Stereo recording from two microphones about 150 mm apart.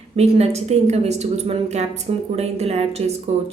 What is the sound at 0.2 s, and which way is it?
A woman's voice, 45° right (ahead or behind).